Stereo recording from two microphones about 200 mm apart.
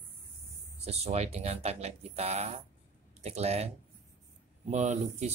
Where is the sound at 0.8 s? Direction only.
30° right (ahead or behind).